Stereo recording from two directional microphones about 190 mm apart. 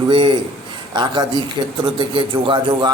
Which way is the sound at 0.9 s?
25° right (ahead or behind).